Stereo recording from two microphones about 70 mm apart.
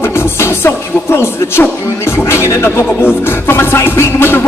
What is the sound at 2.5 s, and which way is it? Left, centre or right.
Speech, left.